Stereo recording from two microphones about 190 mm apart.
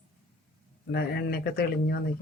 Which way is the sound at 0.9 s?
55° left (ahead or behind).